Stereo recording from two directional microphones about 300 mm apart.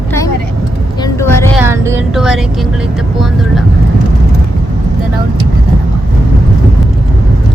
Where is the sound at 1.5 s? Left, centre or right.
Centre.